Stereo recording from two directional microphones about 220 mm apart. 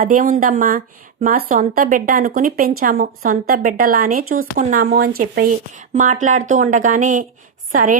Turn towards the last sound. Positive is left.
turn(degrees=-35)  # may be behind; listen again after turning